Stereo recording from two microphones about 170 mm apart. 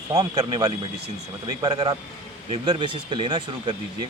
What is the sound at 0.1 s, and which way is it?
Speech, 25° right (ahead or behind).